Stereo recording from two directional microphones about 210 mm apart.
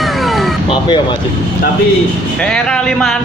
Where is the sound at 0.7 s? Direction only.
20° left (ahead or behind).